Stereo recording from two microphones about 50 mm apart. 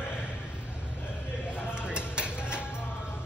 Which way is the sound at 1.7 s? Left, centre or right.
Centre.